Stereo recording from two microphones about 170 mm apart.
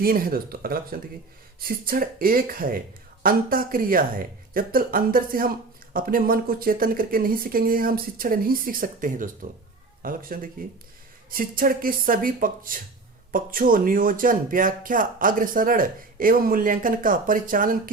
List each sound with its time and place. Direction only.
0.0 s speech: 60° right (ahead or behind)